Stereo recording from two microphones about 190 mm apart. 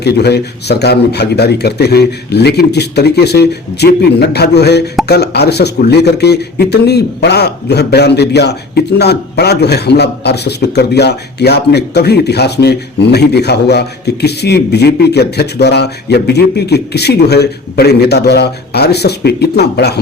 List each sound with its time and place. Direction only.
0.0 s speech: 60° left (ahead or behind)